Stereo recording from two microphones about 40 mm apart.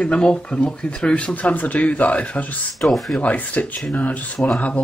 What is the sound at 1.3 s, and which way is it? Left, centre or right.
Speech, left.